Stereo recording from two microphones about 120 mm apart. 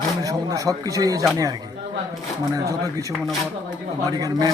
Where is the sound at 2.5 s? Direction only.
30° right (ahead or behind).